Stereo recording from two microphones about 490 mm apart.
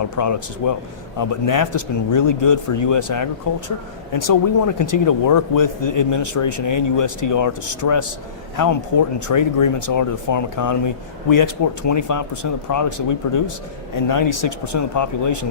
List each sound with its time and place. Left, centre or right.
0.2 s speech: left